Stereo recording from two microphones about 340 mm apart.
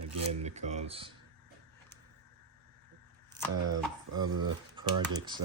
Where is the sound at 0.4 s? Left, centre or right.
Centre.